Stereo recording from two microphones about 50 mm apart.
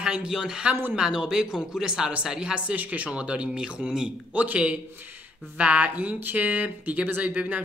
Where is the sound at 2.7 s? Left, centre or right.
Right.